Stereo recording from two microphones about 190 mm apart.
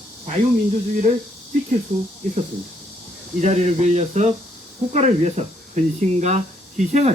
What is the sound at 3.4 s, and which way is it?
Speech, 35° right (ahead or behind).